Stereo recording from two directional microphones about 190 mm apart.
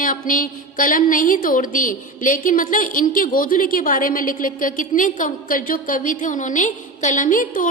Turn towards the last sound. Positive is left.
turn(degrees=45)  # may be behind; listen again after turning